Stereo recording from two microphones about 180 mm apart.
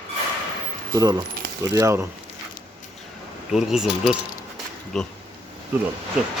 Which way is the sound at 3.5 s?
Centre (ahead or behind).